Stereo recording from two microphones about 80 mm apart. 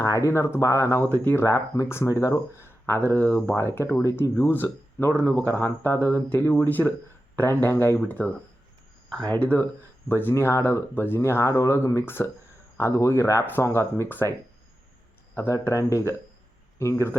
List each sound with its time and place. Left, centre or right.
0.0 s speech: left
1.5 s speech: left
15.4 s speech: left